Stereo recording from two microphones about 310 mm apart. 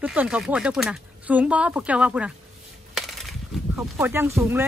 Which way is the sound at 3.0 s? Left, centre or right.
Centre.